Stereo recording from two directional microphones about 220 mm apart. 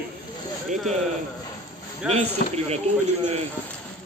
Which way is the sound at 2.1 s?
30° right (ahead or behind).